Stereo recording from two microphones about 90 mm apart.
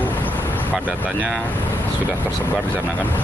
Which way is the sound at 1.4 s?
20° left (ahead or behind).